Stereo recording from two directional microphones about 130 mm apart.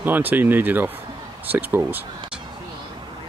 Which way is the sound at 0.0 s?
15° right (ahead or behind).